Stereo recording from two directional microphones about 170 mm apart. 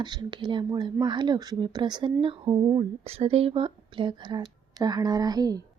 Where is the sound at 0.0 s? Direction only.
25° right (ahead or behind).